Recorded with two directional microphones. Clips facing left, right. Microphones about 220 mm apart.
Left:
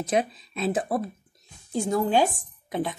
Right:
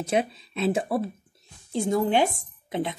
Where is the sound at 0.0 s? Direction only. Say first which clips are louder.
Even; 30° right (ahead or behind).